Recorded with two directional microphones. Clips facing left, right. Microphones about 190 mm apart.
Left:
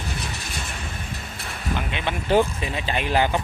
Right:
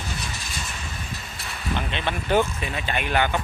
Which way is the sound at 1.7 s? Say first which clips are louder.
Even; 10° left (ahead or behind).